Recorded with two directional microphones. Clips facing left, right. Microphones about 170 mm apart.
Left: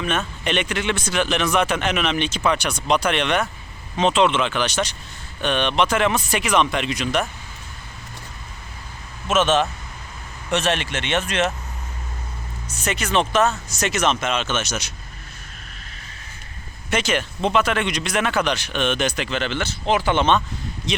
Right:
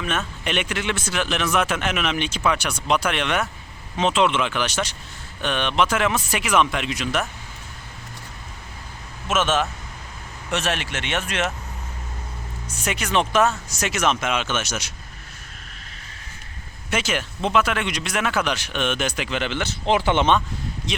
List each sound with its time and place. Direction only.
0.0 s speech: 5° right (ahead or behind)
9.2 s speech: 5° right (ahead or behind)
12.6 s speech: 10° right (ahead or behind)
16.9 s speech: 5° right (ahead or behind)